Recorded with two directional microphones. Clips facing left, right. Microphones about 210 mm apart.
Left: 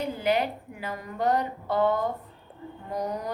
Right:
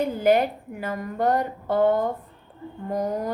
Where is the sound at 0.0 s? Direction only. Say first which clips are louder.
Right 6 dB; 45° right (ahead or behind).